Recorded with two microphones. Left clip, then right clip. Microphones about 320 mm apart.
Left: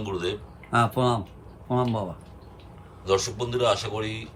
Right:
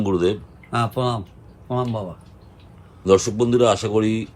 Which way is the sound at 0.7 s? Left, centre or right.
Centre.